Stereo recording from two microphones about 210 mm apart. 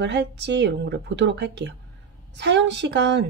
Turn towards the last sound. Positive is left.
turn(degrees=-55)  # may be behind; listen again after turning